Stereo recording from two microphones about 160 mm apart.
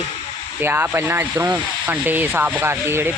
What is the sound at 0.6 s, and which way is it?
Speech, 15° right (ahead or behind).